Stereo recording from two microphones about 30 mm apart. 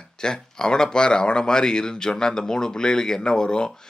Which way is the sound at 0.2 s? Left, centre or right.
Left.